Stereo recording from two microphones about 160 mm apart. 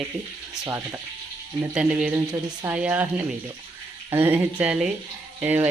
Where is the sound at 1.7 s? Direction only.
5° right (ahead or behind).